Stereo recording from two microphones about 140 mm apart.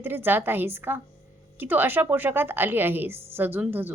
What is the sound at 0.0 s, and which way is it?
A woman's voice, 15° right (ahead or behind).